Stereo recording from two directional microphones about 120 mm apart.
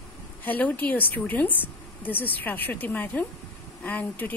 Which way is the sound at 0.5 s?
15° left (ahead or behind).